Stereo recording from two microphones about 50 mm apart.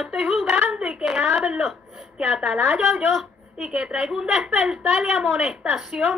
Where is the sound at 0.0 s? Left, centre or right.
Centre.